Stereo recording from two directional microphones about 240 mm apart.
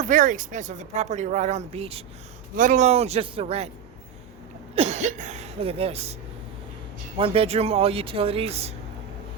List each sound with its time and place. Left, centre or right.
0.0 s speech: right
4.7 s speech: right
7.2 s speech: right